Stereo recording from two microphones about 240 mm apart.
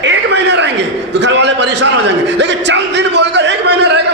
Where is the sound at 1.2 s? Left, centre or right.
Right.